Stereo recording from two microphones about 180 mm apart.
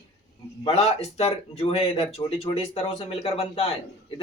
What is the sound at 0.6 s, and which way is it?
Speech, 35° left (ahead or behind).